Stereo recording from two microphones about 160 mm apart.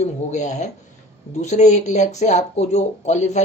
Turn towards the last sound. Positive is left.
turn(degrees=45)  # may be behind; listen again after turning